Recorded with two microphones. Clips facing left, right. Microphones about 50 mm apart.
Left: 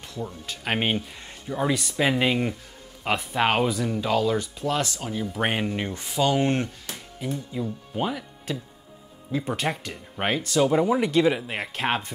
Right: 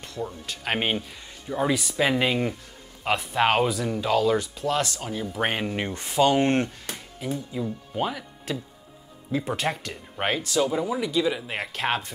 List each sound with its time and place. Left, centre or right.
0.0 s speech: centre
2.0 s speech: centre
6.0 s speech: centre
6.6 s speech: centre
10.7 s speech: left
11.4 s speech: centre